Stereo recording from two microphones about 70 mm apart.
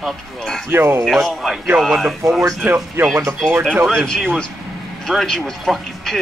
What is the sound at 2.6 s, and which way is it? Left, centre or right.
Speech, right.